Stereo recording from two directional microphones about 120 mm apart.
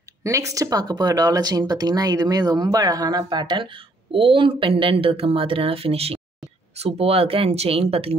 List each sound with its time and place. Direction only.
0.2 s speech: 25° right (ahead or behind); by 8.1 s 55° right (ahead or behind)